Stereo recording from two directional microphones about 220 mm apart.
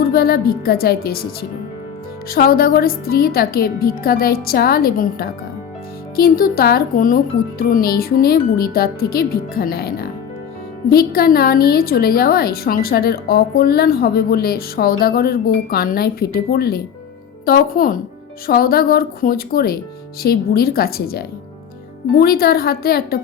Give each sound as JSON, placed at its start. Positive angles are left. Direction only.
{"t": 0.0, "sound": "a woman's voice", "side_deg": 45}